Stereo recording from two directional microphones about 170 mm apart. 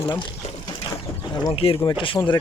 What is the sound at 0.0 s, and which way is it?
Speech, 30° left (ahead or behind).